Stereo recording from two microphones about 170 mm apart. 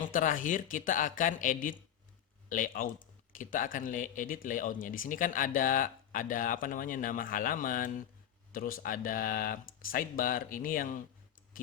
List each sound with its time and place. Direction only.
0.0 s speech: 50° left (ahead or behind)